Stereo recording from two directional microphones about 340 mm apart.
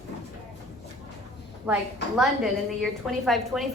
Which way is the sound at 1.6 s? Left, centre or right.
Centre.